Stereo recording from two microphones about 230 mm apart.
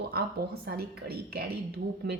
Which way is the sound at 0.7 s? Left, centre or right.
Right.